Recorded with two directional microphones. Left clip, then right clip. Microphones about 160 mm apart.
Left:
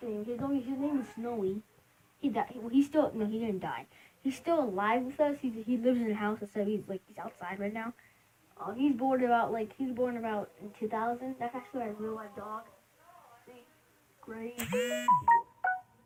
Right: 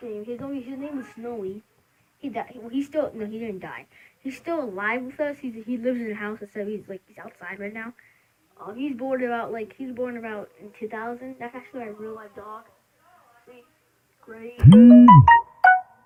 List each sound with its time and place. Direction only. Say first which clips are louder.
0.1 s speech: right 1 dB; centre (ahead or behind)
2.2 s a woman's voice: right 1 dB; 10° left (ahead or behind); by 12.5 s 5° right (ahead or behind)
14.3 s speech: right 3 dB; centre (ahead or behind)
15.0 s music: right 13 dB; 55° right (ahead or behind)